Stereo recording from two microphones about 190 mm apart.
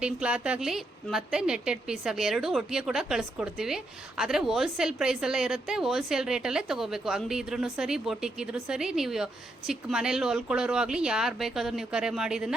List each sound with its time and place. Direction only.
0.0 s a woman's voice: 5° right (ahead or behind)